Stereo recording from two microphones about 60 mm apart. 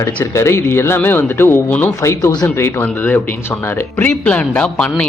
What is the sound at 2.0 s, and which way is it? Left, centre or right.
Speech, left.